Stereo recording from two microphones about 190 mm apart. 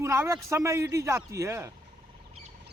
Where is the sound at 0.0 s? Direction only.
15° right (ahead or behind).